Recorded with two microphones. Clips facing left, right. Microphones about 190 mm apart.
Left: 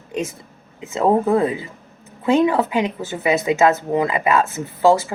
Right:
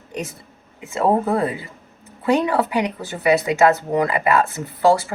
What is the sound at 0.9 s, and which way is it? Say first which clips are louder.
Speech: left 2 dB; 20° left (ahead or behind).